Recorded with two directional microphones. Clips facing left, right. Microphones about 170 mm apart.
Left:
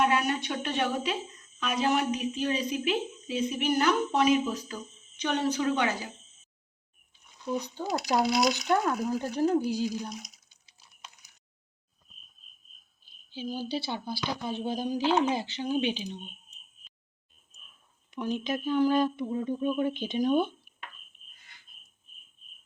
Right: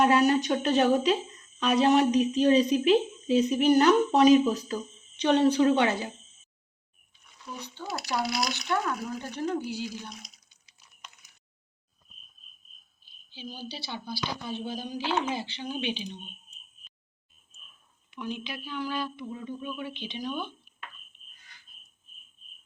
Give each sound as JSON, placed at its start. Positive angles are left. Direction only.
{"t": 0.0, "sound": "a woman's voice", "side_deg": -35}
{"t": 7.4, "sound": "speech", "side_deg": 35}
{"t": 10.7, "sound": "a sound", "side_deg": 30}
{"t": 13.3, "sound": "a woman's voice", "side_deg": 45}
{"t": 18.1, "sound": "a woman's voice", "side_deg": 40}